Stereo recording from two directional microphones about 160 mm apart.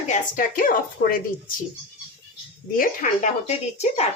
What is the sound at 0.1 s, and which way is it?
A woman's voice, 60° left (ahead or behind).